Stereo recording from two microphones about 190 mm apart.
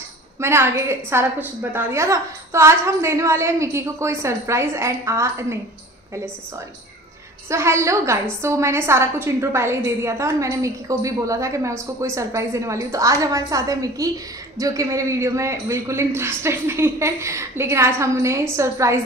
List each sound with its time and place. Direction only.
0.4 s a woman's voice: 15° right (ahead or behind)
7.4 s a woman's voice: 15° right (ahead or behind)